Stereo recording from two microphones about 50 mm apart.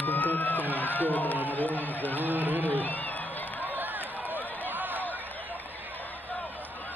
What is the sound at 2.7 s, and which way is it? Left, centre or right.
Speech, left.